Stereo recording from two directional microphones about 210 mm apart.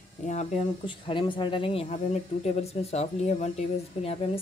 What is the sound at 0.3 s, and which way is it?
A woman's voice, 30° left (ahead or behind).